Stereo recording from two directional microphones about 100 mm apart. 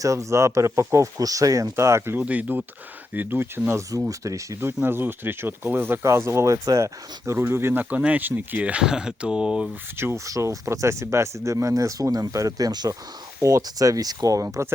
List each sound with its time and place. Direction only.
0.0 s speech: 30° right (ahead or behind)
2.2 s speech: 15° right (ahead or behind); by 4.7 s 30° right (ahead or behind)
4.8 s speech: 20° right (ahead or behind)
10.0 s speech: 30° right (ahead or behind)